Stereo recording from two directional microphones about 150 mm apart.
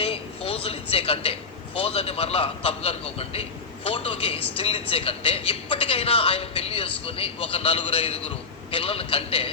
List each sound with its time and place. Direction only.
0.0 s speech: 40° left (ahead or behind)